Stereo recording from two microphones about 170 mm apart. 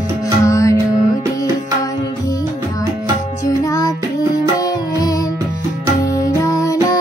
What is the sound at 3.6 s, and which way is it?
Music, 20° left (ahead or behind).